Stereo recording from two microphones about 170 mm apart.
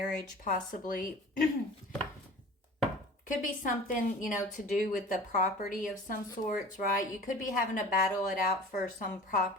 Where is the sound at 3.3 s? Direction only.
55° left (ahead or behind).